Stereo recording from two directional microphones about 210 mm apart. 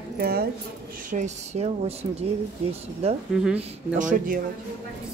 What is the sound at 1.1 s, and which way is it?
Speech, 35° right (ahead or behind).